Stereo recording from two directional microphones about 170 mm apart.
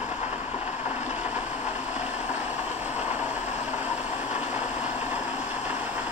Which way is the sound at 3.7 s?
40° left (ahead or behind).